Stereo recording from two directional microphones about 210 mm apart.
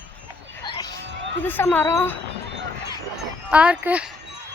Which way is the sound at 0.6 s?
20° left (ahead or behind).